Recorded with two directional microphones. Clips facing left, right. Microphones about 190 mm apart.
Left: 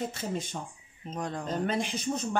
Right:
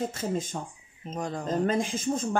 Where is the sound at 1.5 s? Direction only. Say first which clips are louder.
Right 5 dB; 45° right (ahead or behind).